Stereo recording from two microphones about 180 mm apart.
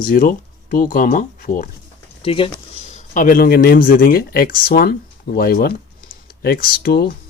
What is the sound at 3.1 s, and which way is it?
Speech, 50° left (ahead or behind).